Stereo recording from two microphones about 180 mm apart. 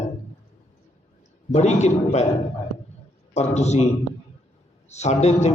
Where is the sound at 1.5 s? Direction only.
40° left (ahead or behind).